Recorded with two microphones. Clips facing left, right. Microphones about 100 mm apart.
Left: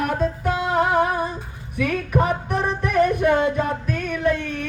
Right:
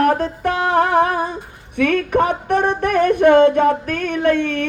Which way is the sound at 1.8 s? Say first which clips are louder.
Right 5 dB; 75° right (ahead or behind).